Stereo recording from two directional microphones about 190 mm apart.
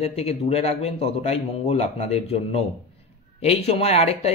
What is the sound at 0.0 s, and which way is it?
Speech, 35° left (ahead or behind).